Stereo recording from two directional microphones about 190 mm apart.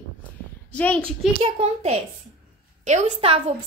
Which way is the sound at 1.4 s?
30° right (ahead or behind).